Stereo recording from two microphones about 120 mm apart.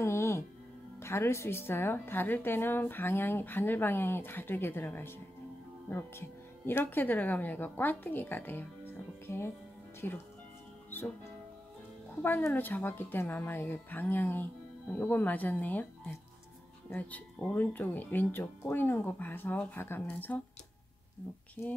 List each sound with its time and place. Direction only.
0.0 s music: 20° left (ahead or behind)
1.0 s a woman's voice: 20° left (ahead or behind)
12.2 s a woman's voice: 15° left (ahead or behind)
16.9 s a woman's voice: 15° left (ahead or behind)
21.6 s a woman's voice: 10° left (ahead or behind)